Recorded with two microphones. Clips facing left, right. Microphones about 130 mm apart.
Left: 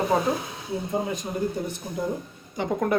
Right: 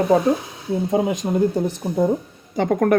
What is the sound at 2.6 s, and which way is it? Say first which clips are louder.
Speech: right 7 dB; 60° right (ahead or behind).